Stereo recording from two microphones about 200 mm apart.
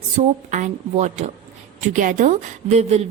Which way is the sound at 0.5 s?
35° right (ahead or behind).